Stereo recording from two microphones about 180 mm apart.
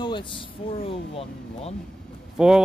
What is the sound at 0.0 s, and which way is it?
Speech, 25° left (ahead or behind).